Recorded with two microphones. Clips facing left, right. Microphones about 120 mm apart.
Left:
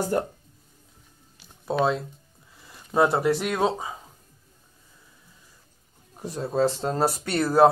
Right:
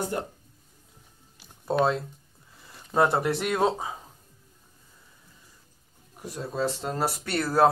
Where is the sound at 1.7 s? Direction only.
Centre (ahead or behind).